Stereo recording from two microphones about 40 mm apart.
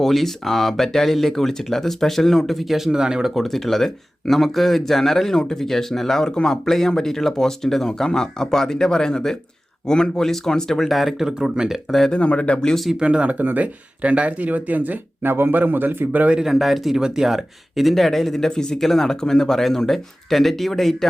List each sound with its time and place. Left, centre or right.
0.0 s speech: centre
2.9 s speech: centre
3.3 s speech: centre
10.8 s speech: centre
11.2 s speech: centre
11.9 s speech: centre
12.1 s speech: left
13.0 s speech: right
13.3 s speech: right
15.2 s a man's voice: right
16.4 s speech: centre
17.9 s speech: centre